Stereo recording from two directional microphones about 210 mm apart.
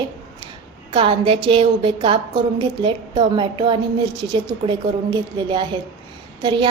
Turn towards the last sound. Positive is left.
turn(degrees=-20)  # may be behind; listen again after turning